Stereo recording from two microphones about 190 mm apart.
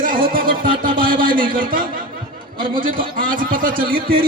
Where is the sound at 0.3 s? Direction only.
50° right (ahead or behind).